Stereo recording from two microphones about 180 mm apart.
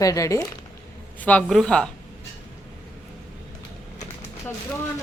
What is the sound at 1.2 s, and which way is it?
Speech, 5° left (ahead or behind).